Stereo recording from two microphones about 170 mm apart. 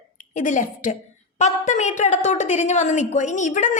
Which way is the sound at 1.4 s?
45° left (ahead or behind).